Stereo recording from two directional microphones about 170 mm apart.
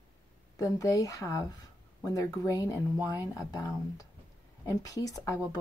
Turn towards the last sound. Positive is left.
turn(degrees=20)  # may be behind; listen again after turning